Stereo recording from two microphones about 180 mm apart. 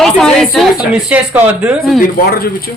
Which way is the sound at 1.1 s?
10° right (ahead or behind).